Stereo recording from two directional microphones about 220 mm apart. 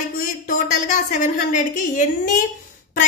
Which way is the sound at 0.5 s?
35° left (ahead or behind).